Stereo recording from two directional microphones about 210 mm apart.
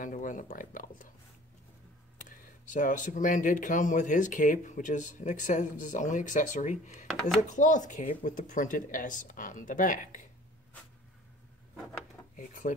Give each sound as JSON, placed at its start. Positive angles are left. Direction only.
{"t": 0.0, "sound": "speech", "side_deg": 40}
{"t": 2.2, "sound": "speech", "side_deg": 40}
{"t": 12.4, "sound": "speech", "side_deg": 40}